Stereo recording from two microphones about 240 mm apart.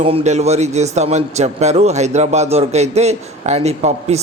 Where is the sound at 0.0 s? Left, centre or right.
Right.